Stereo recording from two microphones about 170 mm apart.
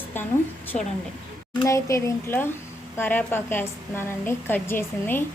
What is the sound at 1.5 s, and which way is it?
A woman's voice, 20° left (ahead or behind).